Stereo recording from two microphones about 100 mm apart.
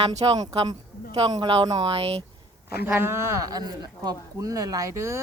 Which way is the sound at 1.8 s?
80° right.